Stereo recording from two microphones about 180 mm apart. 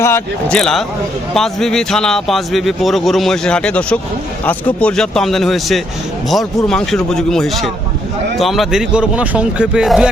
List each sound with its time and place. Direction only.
0.0 s a man's voice: 10° left (ahead or behind)